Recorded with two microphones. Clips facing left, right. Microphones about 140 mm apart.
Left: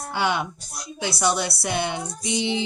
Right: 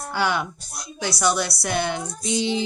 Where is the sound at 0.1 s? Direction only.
20° left (ahead or behind).